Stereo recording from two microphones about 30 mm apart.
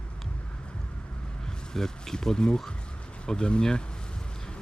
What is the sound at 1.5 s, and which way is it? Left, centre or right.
Speech, centre.